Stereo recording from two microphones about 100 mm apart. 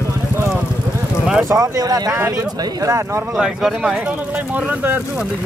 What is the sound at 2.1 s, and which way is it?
Speech, 30° right (ahead or behind).